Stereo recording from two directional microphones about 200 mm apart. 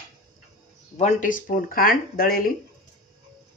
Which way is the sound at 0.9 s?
35° left (ahead or behind).